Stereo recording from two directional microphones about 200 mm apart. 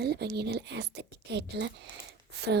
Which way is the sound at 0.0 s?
50° right (ahead or behind).